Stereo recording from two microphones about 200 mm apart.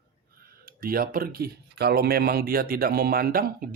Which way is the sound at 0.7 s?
45° right (ahead or behind).